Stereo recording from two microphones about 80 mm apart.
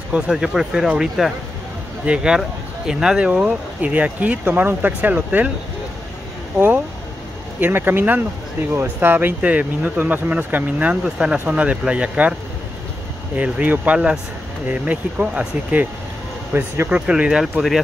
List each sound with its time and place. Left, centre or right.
0.3 s speech: centre; by 5.5 s right
7.6 s speech: right
13.4 s speech: centre
16.5 s speech: right
16.9 s speech: centre